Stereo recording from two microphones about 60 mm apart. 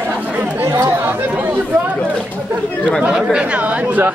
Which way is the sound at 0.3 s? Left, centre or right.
Right.